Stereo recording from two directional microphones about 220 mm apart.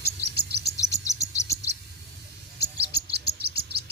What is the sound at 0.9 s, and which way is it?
Chirp, 15° left (ahead or behind).